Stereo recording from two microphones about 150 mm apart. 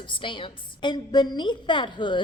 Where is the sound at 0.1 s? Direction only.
35° left (ahead or behind).